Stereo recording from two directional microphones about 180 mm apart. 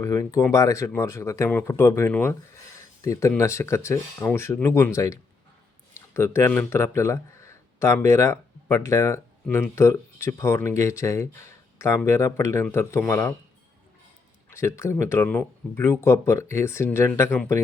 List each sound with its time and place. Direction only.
0.0 s speech: 15° left (ahead or behind)
14.5 s speech: 15° left (ahead or behind)